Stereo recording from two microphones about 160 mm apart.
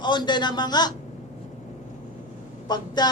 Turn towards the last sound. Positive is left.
turn(degrees=25)  # may be behind; listen again after turning